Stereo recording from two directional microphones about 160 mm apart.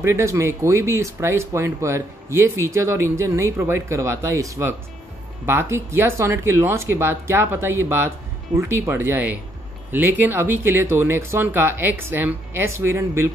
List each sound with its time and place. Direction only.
0.0 s speech: 15° right (ahead or behind)